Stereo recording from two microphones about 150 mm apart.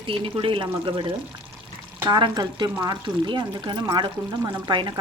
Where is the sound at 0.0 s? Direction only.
35° right (ahead or behind).